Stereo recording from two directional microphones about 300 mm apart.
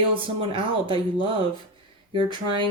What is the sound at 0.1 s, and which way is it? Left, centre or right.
Speech, centre.